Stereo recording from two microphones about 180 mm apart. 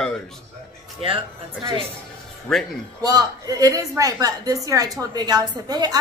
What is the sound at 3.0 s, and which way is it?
A woman's voice, 20° right (ahead or behind).